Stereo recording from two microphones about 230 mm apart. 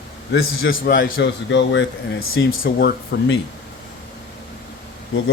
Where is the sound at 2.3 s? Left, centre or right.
Left.